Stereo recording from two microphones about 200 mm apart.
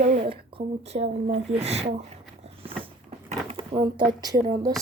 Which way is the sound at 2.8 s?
30° right (ahead or behind).